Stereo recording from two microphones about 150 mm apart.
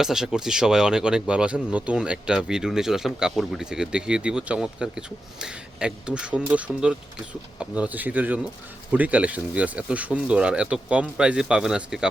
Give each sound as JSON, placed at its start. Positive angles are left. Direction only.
{"t": 0.0, "sound": "speech", "side_deg": -5}